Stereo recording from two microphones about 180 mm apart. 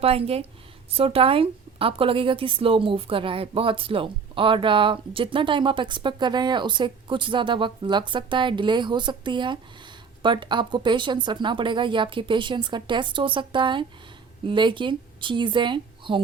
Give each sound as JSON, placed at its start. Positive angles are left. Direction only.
{"t": 0.0, "sound": "a woman's voice", "side_deg": -35}